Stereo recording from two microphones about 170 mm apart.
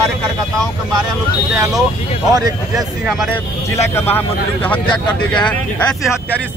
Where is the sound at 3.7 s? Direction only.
15° left (ahead or behind).